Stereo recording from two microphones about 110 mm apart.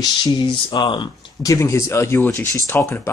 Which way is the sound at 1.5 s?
25° left (ahead or behind).